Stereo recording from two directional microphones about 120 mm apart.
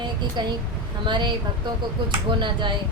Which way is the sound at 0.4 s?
40° right (ahead or behind).